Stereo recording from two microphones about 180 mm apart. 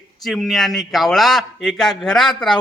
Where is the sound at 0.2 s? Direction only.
Centre (ahead or behind).